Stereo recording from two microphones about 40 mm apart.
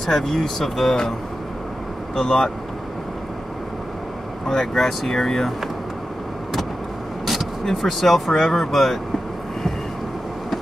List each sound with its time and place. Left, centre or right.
0.0 s speech: centre
2.1 s speech: left
4.5 s speech: centre
7.6 s speech: centre